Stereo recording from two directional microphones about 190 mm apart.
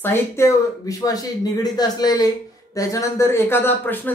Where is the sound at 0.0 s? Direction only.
15° left (ahead or behind).